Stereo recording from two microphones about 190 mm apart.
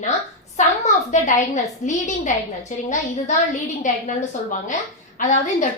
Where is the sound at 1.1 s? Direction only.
40° left (ahead or behind).